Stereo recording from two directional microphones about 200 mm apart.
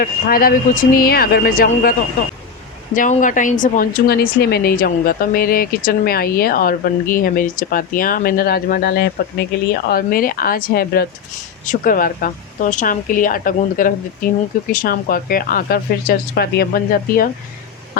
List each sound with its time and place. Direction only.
0.0 s a woman's voice: 45° left (ahead or behind)